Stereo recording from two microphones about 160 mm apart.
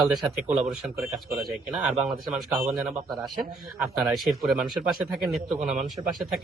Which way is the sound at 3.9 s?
Centre (ahead or behind).